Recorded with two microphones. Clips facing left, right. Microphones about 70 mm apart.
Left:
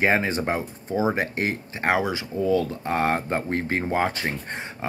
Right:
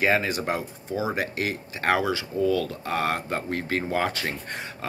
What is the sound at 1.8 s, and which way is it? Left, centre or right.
Speech, centre.